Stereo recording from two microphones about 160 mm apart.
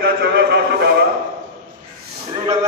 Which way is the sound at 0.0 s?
90° right.